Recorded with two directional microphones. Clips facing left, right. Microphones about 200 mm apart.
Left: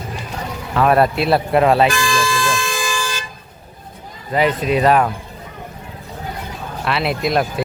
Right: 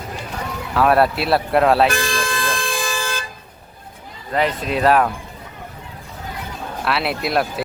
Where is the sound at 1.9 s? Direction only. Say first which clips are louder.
Left 3 dB; 55° right (ahead or behind).